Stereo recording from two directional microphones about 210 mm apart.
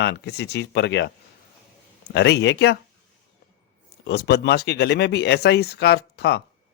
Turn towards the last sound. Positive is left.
turn(degrees=50)  # may be behind; listen again after turning